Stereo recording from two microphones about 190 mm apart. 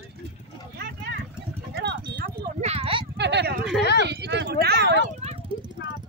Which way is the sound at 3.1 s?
65° right (ahead or behind).